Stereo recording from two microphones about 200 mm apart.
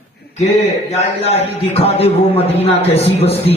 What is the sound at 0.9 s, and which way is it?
A man's voice, 30° left (ahead or behind).